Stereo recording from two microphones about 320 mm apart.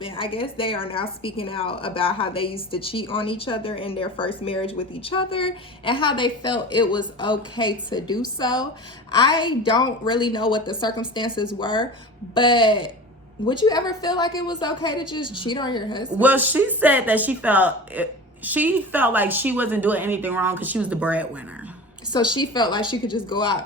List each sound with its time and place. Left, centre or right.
0.0 s a woman's voice: centre
16.1 s speech: centre
22.1 s a woman's voice: centre